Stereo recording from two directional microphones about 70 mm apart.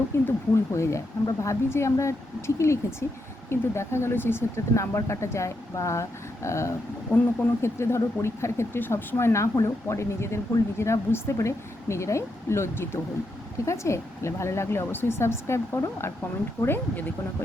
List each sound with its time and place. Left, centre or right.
0.1 s speech: left
7.1 s speech: left